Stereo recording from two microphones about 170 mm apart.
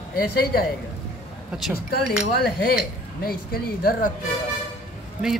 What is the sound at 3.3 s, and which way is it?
Speech, 60° left (ahead or behind).